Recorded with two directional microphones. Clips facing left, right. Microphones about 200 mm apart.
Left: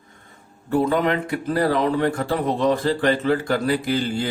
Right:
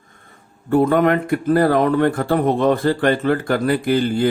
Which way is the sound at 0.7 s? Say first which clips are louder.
Right 5 dB; 55° right (ahead or behind).